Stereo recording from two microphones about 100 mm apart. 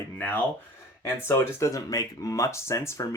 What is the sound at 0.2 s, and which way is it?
Speech, 15° left (ahead or behind).